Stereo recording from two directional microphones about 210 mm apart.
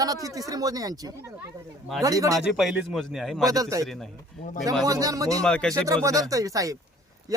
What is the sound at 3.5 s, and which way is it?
Speech, 15° right (ahead or behind).